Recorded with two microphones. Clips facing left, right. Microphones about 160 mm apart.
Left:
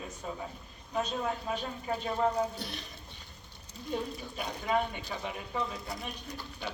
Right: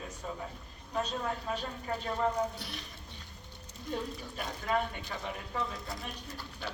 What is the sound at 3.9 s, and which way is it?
Speech, 5° left (ahead or behind).